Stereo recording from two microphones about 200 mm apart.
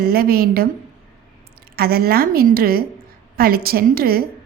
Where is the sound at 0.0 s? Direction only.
50° right (ahead or behind).